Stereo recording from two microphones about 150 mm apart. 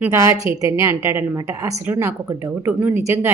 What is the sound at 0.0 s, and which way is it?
A woman's voice, 15° right (ahead or behind).